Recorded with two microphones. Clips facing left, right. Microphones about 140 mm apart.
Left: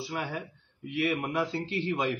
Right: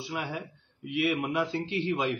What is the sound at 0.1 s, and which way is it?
Speech, centre (ahead or behind).